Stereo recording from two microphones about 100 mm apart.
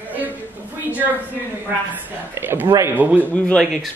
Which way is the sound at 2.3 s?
20° right (ahead or behind).